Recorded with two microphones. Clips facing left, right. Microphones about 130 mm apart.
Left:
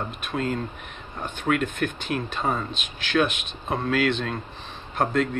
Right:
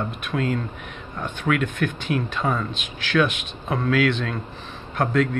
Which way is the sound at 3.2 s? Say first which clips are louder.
Right 2 dB; 25° left (ahead or behind).